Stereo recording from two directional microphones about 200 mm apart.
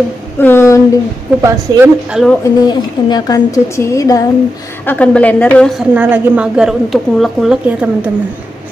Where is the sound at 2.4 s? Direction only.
20° left (ahead or behind).